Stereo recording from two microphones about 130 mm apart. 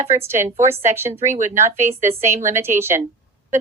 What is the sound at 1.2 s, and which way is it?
Speech, 70° right (ahead or behind).